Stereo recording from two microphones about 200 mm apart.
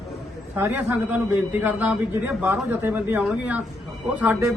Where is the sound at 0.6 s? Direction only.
10° right (ahead or behind).